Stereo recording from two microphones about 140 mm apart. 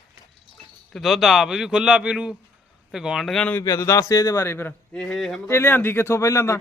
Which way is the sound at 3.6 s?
25° left (ahead or behind).